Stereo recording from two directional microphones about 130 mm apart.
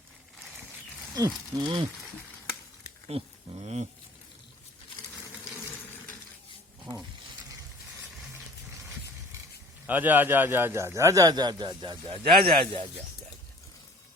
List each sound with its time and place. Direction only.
1.1 s speech: 30° right (ahead or behind)
3.1 s speech: 55° right (ahead or behind)
9.8 s a man's voice: 15° right (ahead or behind); by 11.9 s 35° right (ahead or behind)
12.0 s speech: 45° right (ahead or behind)